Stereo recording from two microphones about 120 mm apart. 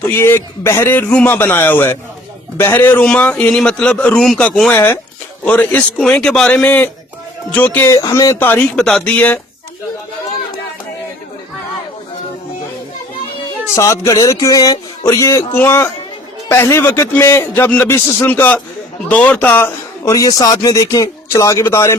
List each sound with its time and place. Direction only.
0.2 s a man's voice: 20° left (ahead or behind)
4.7 s a man's voice: 15° left (ahead or behind)
7.9 s a man's voice: 30° left (ahead or behind)
8.4 s a man's voice: 10° left (ahead or behind)
13.7 s a man's voice: 25° left (ahead or behind)
20.1 s a man's voice: 30° left (ahead or behind)